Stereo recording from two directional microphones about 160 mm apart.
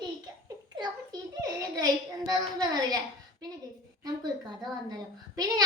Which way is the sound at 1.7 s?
25° right (ahead or behind).